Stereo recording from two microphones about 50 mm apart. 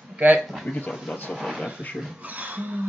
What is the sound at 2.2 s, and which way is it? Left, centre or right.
Speech, right.